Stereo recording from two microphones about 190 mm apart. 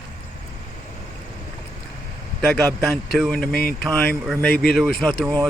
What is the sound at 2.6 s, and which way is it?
Speech, 5° left (ahead or behind).